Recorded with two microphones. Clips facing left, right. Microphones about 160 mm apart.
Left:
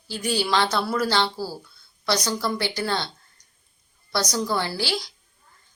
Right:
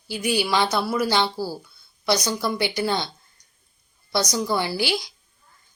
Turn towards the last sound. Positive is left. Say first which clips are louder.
# right 3 dB
turn(degrees=-15)  # may be behind; listen again after turning